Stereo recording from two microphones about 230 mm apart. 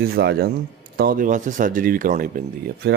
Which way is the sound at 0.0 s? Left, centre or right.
Right.